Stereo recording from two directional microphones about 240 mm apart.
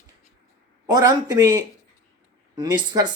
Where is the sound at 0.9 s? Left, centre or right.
Centre.